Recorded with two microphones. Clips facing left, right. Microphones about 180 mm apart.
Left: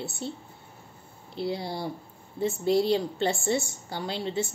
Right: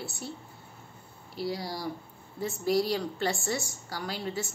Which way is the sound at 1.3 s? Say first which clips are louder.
Left 3 dB; 25° left (ahead or behind).